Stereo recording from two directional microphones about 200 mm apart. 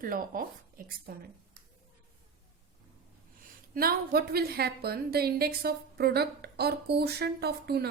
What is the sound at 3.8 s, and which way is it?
A woman's voice, 50° right (ahead or behind).